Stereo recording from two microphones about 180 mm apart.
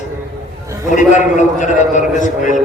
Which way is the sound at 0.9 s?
45° left (ahead or behind).